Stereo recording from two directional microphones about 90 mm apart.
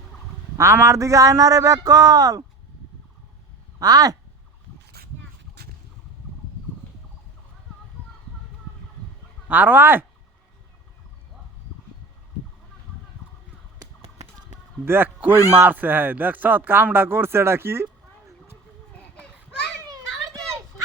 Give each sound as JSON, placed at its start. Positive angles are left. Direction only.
{"t": 0.5, "sound": "a man's voice", "side_deg": -35}
{"t": 3.8, "sound": "speech", "side_deg": -45}
{"t": 9.5, "sound": "speech", "side_deg": -20}
{"t": 14.8, "sound": "speech", "side_deg": -25}